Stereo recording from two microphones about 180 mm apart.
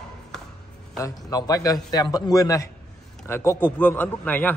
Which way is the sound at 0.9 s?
20° left (ahead or behind).